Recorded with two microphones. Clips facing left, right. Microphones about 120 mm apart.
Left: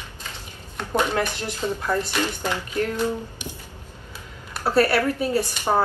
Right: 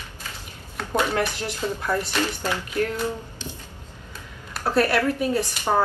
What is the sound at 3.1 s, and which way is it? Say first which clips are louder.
Speech: left 3 dB; 15° left (ahead or behind).